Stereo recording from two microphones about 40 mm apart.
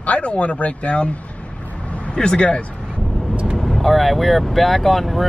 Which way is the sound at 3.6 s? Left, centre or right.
Centre.